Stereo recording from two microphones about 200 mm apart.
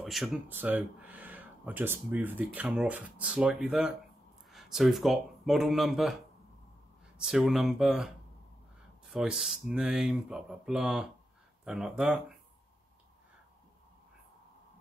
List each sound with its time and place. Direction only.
0.0 s speech: centre (ahead or behind)
7.2 s speech: 5° right (ahead or behind)